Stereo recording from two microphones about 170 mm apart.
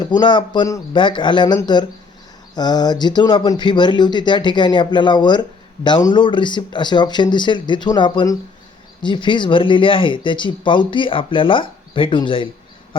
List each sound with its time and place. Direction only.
0.0 s speech: 25° left (ahead or behind)